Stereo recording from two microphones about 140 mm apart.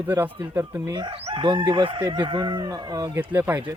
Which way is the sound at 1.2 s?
35° right (ahead or behind).